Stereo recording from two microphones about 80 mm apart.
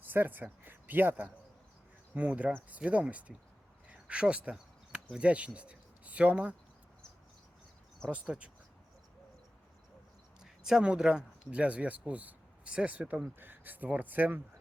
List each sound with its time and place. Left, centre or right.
0.0 s speech: right
3.8 s a sound: centre
5.1 s speech: centre
8.1 s speech: centre
10.4 s speech: centre; by 14.4 s right